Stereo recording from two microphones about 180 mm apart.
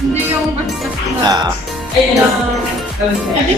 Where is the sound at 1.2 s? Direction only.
25° right (ahead or behind).